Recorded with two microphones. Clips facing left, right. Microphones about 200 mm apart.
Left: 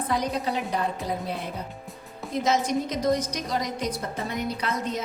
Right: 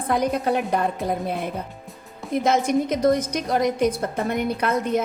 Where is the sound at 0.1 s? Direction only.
55° right (ahead or behind).